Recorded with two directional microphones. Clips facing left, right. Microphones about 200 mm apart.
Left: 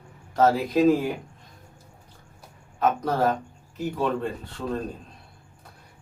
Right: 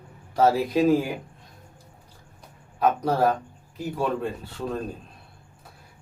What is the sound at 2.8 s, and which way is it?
Speech, 10° right (ahead or behind).